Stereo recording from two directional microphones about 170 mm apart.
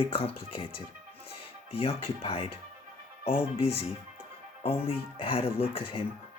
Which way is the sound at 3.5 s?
35° left (ahead or behind).